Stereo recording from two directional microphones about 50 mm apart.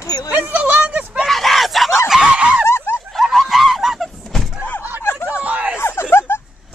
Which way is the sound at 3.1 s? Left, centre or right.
Centre.